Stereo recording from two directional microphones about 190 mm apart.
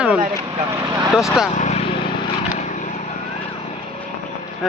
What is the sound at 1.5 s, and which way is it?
Vehicle, 40° left (ahead or behind).